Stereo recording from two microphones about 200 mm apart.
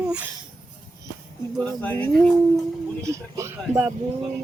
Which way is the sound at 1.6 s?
5° left (ahead or behind).